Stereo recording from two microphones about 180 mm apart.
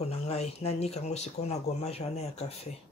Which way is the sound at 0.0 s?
35° left (ahead or behind).